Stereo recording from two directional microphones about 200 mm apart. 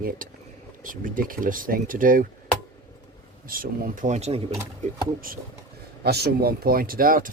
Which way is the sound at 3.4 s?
45° right (ahead or behind).